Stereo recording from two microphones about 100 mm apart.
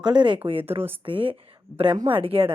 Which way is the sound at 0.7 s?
65° right (ahead or behind).